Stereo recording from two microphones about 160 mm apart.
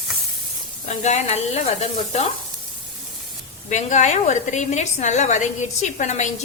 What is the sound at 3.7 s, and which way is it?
A woman's voice, 50° left (ahead or behind).